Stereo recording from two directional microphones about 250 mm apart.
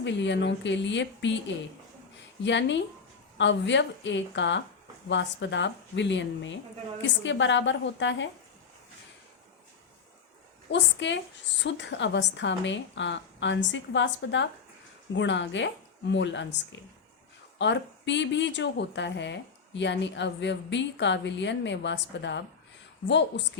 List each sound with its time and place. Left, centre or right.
0.0 s speech: left
10.7 s speech: left
17.6 s speech: left